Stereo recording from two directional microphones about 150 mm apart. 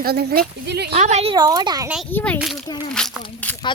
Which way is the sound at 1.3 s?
25° right (ahead or behind).